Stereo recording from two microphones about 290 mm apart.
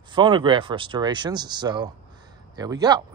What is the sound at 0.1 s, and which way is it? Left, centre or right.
Speech, centre.